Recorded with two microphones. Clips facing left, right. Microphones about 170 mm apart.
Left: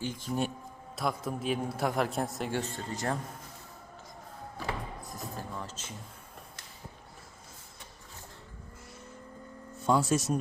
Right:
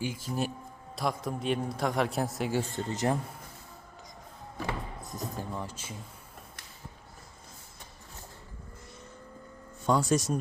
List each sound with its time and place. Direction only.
0.0 s a man's voice: 5° right (ahead or behind)
2.7 s speech: 20° right (ahead or behind)
5.1 s speech: 15° right (ahead or behind)
9.8 s a man's voice: centre (ahead or behind)